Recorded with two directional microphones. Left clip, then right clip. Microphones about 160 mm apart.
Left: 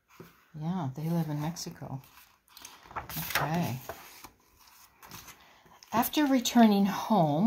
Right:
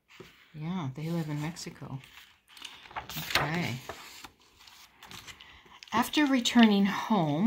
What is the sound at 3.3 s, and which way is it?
Speech, 20° left (ahead or behind).